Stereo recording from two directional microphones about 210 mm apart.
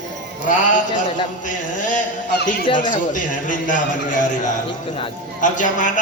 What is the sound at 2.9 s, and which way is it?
A man's voice, 40° left (ahead or behind).